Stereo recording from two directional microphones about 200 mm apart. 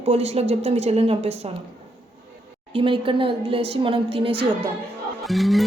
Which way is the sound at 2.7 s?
25° right (ahead or behind).